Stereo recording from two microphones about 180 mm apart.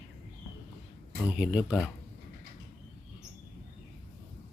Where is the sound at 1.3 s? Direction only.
5° right (ahead or behind).